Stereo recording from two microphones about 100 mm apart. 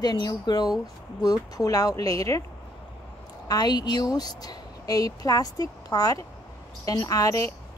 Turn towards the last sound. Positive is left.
turn(degrees=35)  # may be behind; listen again after turning